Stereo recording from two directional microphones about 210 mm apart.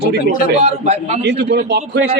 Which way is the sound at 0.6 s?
30° right (ahead or behind).